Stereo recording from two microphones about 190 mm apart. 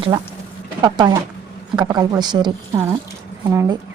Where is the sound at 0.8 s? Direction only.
25° right (ahead or behind).